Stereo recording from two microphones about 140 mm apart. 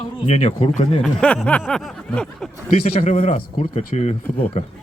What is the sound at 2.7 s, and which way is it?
A man's voice, 45° left (ahead or behind).